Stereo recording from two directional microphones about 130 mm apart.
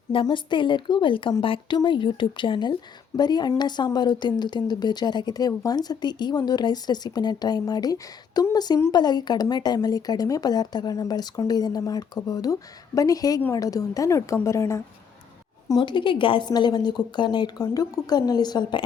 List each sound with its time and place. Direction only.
0.1 s a woman's voice: 40° left (ahead or behind); by 14.8 s 25° left (ahead or behind)
15.7 s speech: 35° left (ahead or behind)